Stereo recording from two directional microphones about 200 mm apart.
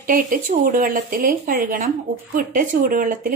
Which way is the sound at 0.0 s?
45° right (ahead or behind).